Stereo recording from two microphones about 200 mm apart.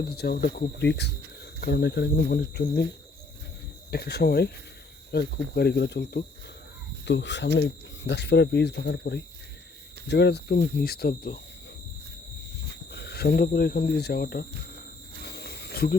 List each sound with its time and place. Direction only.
0.2 s speech: 55° left (ahead or behind)
3.9 s speech: 55° left (ahead or behind)
12.9 s speech: 55° left (ahead or behind)
15.2 s cricket: 55° left (ahead or behind)